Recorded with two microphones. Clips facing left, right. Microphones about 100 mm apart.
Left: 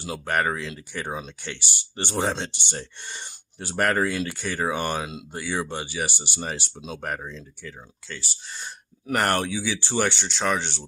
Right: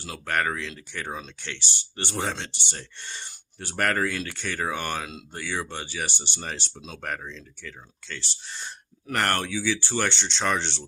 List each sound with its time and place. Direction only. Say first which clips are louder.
0.0 s speech: left 2 dB; 15° left (ahead or behind)
2.0 s speech: left 4 dB; 20° left (ahead or behind); by 8.7 s 5° left (ahead or behind)
9.0 s speech: left 3 dB; 15° left (ahead or behind)